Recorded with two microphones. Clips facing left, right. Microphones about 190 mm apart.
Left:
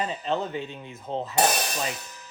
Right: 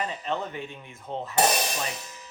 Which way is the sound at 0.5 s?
20° left (ahead or behind).